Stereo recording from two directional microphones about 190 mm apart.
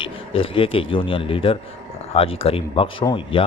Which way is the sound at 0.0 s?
30° left (ahead or behind).